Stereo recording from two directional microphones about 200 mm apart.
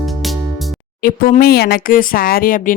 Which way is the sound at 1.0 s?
45° left (ahead or behind).